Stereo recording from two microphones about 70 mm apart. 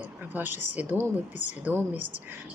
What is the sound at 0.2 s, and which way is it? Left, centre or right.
A woman's voice, right.